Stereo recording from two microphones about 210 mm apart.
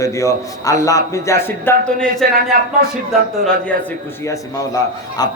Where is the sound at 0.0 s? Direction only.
15° left (ahead or behind).